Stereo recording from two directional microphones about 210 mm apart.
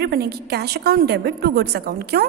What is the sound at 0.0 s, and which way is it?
A woman's voice, 50° right (ahead or behind).